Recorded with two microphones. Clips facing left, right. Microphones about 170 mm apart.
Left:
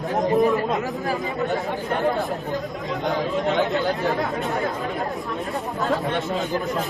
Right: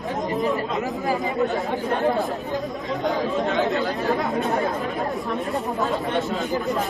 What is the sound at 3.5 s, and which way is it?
Speech, centre (ahead or behind).